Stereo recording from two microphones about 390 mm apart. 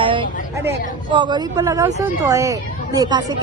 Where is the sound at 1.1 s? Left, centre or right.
Centre.